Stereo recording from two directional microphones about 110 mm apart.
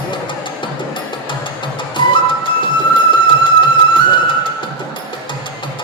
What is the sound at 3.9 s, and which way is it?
Music, 50° left (ahead or behind).